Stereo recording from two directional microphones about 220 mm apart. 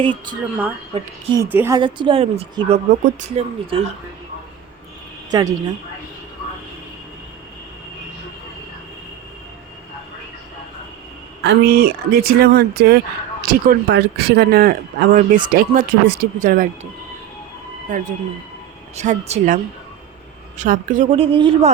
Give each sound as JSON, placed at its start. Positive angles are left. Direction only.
{"t": 0.0, "sound": "speech", "side_deg": -20}
{"t": 1.4, "sound": "speech", "side_deg": -10}
{"t": 5.3, "sound": "a woman's voice", "side_deg": -20}
{"t": 11.4, "sound": "speech", "side_deg": -45}
{"t": 18.9, "sound": "speech", "side_deg": -30}
{"t": 20.6, "sound": "speech", "side_deg": -35}